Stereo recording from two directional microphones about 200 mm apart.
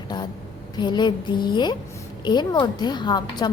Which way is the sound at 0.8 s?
20° left (ahead or behind).